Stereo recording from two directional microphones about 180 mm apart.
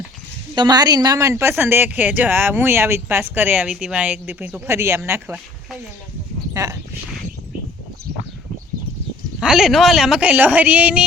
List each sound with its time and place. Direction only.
0.5 s speech: 25° right (ahead or behind)
6.5 s speech: 15° right (ahead or behind)
9.4 s speech: centre (ahead or behind)